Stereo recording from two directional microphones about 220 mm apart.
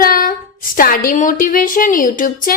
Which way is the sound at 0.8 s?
40° left (ahead or behind).